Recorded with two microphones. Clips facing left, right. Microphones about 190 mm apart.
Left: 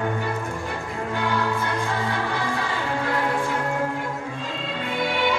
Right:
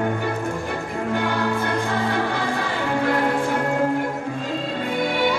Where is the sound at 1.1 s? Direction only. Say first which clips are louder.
Right 1 dB; 55° right (ahead or behind).